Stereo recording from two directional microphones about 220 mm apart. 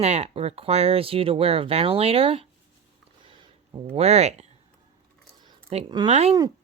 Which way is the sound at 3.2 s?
20° right (ahead or behind).